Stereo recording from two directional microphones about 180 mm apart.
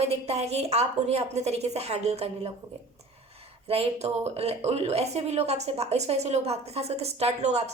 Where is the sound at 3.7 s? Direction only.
35° right (ahead or behind).